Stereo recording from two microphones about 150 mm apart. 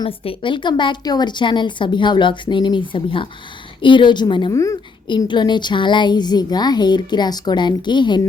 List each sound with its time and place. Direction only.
0.0 s a woman's voice: 35° left (ahead or behind)
4.5 s a woman's voice: 20° left (ahead or behind)
5.0 s a woman's voice: 30° left (ahead or behind)